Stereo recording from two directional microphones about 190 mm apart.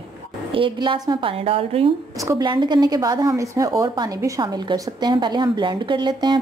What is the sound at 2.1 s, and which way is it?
Speech, 20° right (ahead or behind).